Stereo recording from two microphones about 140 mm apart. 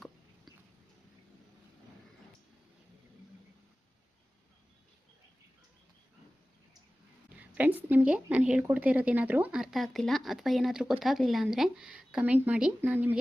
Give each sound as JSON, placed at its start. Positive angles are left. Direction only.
{"t": 7.3, "sound": "speech", "side_deg": -10}